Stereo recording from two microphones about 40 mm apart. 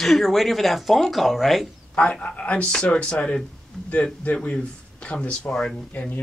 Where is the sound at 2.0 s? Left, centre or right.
Left.